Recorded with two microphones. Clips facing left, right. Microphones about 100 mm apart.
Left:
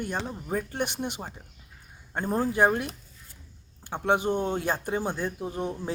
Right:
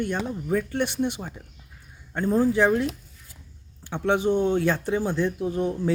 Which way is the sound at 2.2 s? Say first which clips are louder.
Right 6 dB; 15° left (ahead or behind).